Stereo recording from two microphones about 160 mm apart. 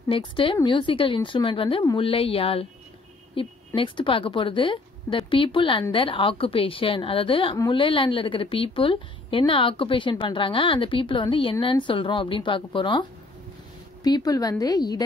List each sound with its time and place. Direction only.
0.1 s a woman's voice: 30° left (ahead or behind)
14.0 s a woman's voice: 25° left (ahead or behind)